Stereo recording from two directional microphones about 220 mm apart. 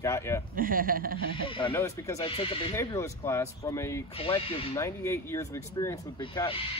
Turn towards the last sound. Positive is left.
turn(degrees=25)  # may be behind; listen again after turning